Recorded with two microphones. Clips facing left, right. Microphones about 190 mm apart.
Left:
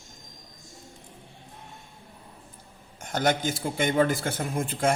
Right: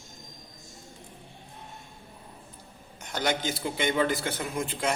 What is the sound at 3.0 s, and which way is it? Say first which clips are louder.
A man's voice: left 4 dB; 50° left (ahead or behind).